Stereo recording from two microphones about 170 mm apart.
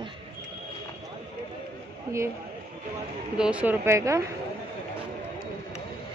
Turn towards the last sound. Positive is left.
turn(degrees=-15)  # may be behind; listen again after turning